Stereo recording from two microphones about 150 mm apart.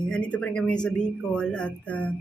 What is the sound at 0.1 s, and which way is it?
A man's voice, 5° left (ahead or behind).